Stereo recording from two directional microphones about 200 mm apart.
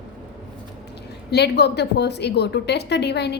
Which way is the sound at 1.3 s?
55° left (ahead or behind).